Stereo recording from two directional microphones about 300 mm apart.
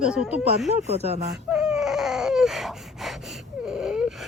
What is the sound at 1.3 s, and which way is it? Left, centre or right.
Baby cry, centre.